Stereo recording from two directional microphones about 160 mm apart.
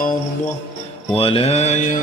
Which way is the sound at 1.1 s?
35° left (ahead or behind).